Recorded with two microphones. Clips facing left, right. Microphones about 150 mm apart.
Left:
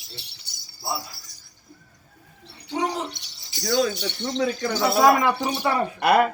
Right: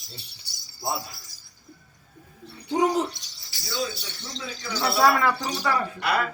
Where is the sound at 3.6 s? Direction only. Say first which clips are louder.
Left 8 dB; 60° left (ahead or behind).